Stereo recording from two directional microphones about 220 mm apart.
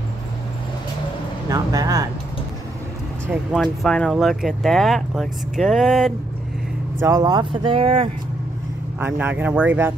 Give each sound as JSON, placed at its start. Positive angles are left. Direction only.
{"t": 1.5, "sound": "speech", "side_deg": -15}
{"t": 3.5, "sound": "speech", "side_deg": 5}
{"t": 7.0, "sound": "speech", "side_deg": -15}
{"t": 9.0, "sound": "speech", "side_deg": -10}